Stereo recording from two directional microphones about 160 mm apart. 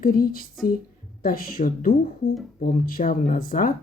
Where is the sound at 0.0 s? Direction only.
65° left (ahead or behind).